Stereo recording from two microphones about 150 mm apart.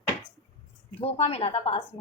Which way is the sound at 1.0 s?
40° left (ahead or behind).